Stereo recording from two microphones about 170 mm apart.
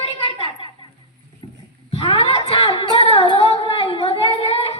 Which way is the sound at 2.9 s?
35° left (ahead or behind).